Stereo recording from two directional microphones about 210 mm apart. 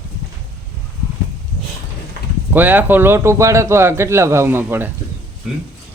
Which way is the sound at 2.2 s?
50° right (ahead or behind).